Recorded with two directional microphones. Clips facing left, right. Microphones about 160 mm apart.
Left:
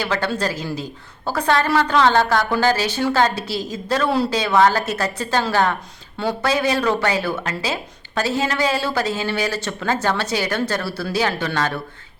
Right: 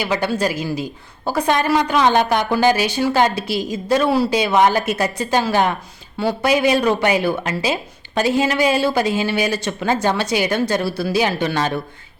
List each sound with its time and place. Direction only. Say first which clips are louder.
0.0 s a woman's voice: right 2 dB; 15° right (ahead or behind)